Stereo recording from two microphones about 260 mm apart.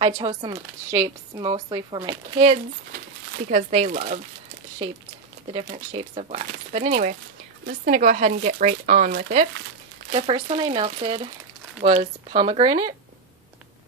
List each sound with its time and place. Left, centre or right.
0.0 s speech: centre
5.5 s speech: right